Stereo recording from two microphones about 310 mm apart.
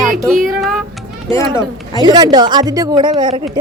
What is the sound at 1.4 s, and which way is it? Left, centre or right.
Speech, centre.